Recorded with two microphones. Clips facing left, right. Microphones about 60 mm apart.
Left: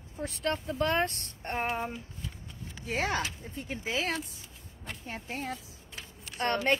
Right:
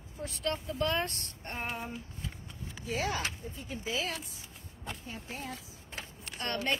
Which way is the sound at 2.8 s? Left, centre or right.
Left.